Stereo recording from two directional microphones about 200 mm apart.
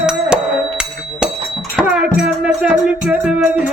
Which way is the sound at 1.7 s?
5° right (ahead or behind).